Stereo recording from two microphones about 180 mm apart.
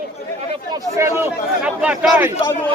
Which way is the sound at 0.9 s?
15° right (ahead or behind).